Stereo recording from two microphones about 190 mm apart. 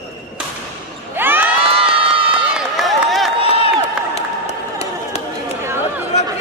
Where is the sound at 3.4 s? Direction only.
30° left (ahead or behind).